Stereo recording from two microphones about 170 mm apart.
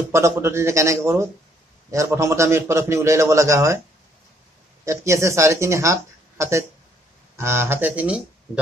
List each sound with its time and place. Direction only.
0.1 s a man's voice: 15° right (ahead or behind)
4.8 s a man's voice: 15° right (ahead or behind)